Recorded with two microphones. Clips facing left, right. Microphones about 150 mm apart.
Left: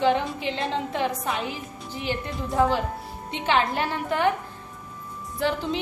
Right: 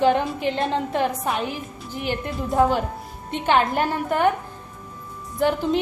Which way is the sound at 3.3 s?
50° right (ahead or behind).